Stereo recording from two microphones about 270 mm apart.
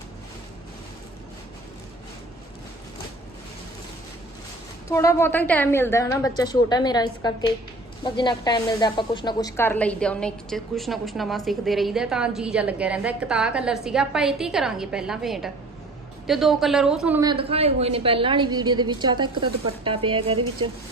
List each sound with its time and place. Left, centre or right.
4.9 s a woman's voice: centre